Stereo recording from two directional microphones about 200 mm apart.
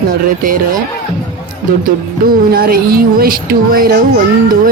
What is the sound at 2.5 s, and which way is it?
Speech, 50° right (ahead or behind).